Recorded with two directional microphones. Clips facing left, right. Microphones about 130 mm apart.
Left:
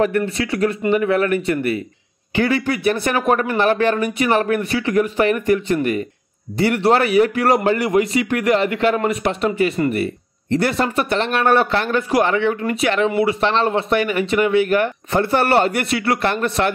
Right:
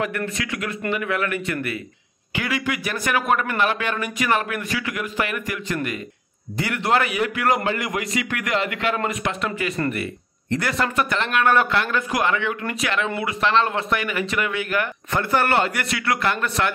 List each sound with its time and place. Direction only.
0.2 s speech: 30° left (ahead or behind)